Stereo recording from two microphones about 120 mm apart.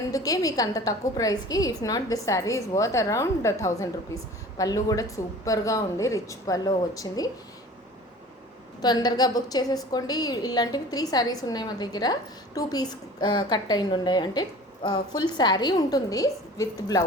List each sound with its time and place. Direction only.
0.1 s a woman's voice: 30° left (ahead or behind)
8.8 s a woman's voice: 35° left (ahead or behind)